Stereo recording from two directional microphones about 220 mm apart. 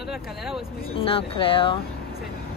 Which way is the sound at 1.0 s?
25° left (ahead or behind).